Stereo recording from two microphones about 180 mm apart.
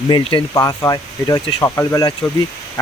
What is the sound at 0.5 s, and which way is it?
Speech, 20° left (ahead or behind).